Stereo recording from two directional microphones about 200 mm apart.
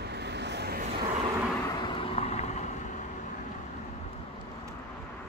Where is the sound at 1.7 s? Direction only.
25° left (ahead or behind).